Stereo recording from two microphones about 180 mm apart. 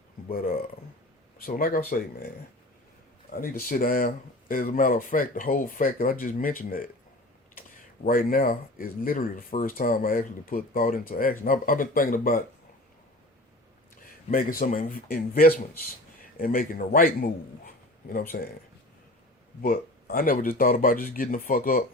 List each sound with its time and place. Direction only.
0.3 s speech: 55° left (ahead or behind)
3.4 s speech: 50° left (ahead or behind)
8.0 s speech: 50° left (ahead or behind)
14.3 s speech: 45° left (ahead or behind)
19.6 s speech: 55° left (ahead or behind)